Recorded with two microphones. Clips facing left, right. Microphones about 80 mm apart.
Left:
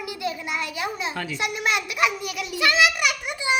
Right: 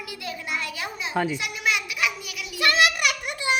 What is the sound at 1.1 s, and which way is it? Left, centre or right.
Speech, centre.